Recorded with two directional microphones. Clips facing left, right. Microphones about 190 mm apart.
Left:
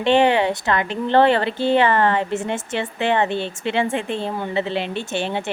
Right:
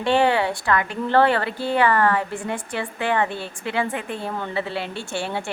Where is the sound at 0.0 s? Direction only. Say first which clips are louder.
Left 3 dB; 20° left (ahead or behind).